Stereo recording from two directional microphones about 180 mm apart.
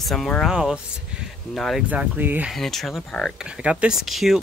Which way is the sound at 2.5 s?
Centre (ahead or behind).